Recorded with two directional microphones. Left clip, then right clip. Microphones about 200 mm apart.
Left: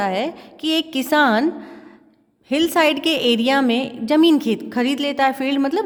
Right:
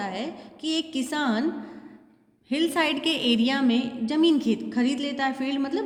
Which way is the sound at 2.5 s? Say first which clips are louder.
Left 8 dB; 40° left (ahead or behind).